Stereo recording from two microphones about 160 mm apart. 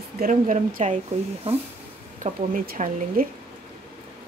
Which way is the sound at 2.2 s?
55° right (ahead or behind).